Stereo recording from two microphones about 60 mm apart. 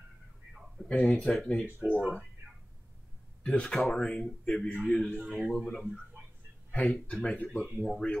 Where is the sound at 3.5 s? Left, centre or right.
Centre.